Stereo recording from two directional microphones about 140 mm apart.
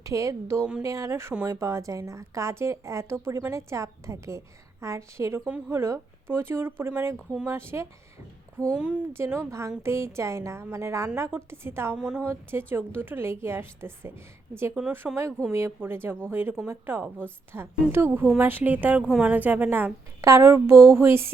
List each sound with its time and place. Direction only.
0.0 s a woman's voice: 20° right (ahead or behind)
9.2 s a woman's voice: 20° right (ahead or behind)
11.9 s a woman's voice: 5° right (ahead or behind)
12.2 s a woman's voice: 15° right (ahead or behind)
19.0 s a woman's voice: centre (ahead or behind)
19.3 s a woman's voice: 10° right (ahead or behind)